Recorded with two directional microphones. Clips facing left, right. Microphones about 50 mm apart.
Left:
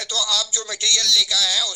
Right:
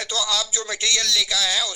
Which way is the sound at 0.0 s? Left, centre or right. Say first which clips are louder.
Even; right.